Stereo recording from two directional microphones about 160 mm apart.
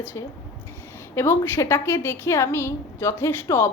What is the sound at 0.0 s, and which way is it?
A woman's voice, 15° left (ahead or behind).